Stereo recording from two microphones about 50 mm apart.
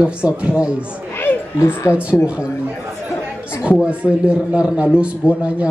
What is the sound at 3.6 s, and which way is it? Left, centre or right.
A man's voice, right.